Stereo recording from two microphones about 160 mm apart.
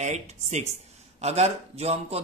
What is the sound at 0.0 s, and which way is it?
A man's voice, 45° right (ahead or behind).